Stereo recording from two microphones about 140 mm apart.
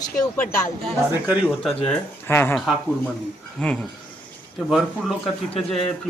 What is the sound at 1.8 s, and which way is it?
Speech, 15° left (ahead or behind).